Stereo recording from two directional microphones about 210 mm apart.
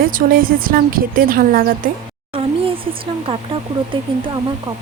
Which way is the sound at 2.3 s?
25° right (ahead or behind).